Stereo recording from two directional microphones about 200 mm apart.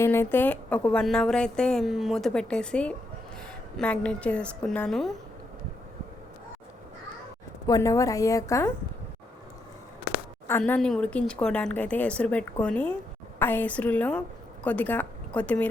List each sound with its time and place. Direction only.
0.0 s speech: 10° left (ahead or behind)
7.7 s a woman's voice: 15° left (ahead or behind)
10.4 s a woman's voice: 10° left (ahead or behind)